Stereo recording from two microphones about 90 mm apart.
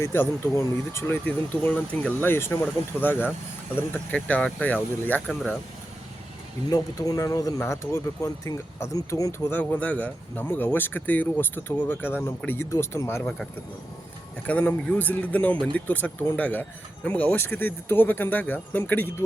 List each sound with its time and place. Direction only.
0.0 s speech: 25° left (ahead or behind)
1.6 s speech: 15° left (ahead or behind)
2.3 s speech: 25° left (ahead or behind)
6.7 s speech: 45° left (ahead or behind)
9.5 s speech: 20° left (ahead or behind)
14.4 s speech: 20° left (ahead or behind)